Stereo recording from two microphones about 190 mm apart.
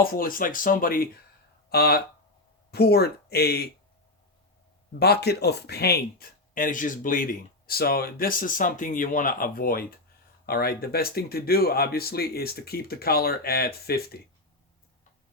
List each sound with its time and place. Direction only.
0.0 s speech: 50° left (ahead or behind)
4.9 s speech: 60° left (ahead or behind)